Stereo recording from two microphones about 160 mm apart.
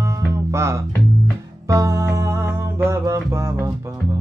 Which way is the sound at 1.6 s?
20° right (ahead or behind).